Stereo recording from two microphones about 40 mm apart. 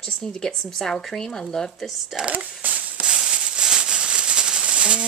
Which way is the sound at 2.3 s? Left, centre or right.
Right.